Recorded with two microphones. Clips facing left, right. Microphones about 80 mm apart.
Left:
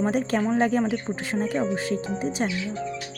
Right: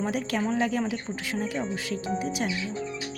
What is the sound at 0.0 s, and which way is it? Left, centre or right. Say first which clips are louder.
Speech: left 4 dB; left.